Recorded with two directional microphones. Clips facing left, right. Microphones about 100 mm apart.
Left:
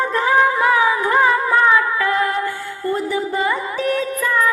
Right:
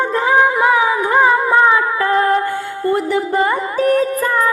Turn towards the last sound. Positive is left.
turn(degrees=-35)  # may be behind; listen again after turning